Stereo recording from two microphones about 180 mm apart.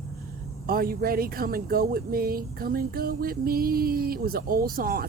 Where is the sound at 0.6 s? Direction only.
55° right (ahead or behind).